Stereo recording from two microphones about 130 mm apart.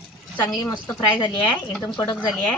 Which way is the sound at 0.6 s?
30° left (ahead or behind).